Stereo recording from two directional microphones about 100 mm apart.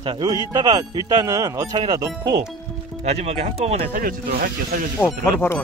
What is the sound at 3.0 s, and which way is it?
Speech, 90° right.